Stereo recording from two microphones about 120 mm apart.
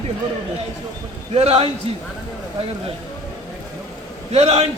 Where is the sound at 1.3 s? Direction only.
60° right (ahead or behind).